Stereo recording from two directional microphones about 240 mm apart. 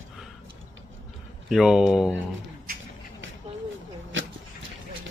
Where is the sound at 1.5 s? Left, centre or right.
Centre.